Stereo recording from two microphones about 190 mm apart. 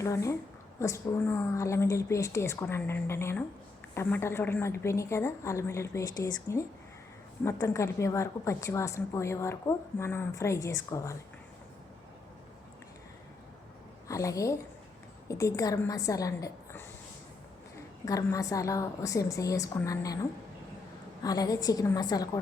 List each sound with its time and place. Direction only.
0.0 s a woman's voice: 15° left (ahead or behind)
14.1 s a woman's voice: 15° left (ahead or behind)
18.0 s a woman's voice: 15° left (ahead or behind)
21.2 s a woman's voice: 20° left (ahead or behind)